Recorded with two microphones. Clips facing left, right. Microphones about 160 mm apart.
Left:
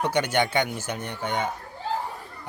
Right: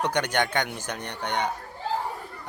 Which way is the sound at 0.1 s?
10° left (ahead or behind).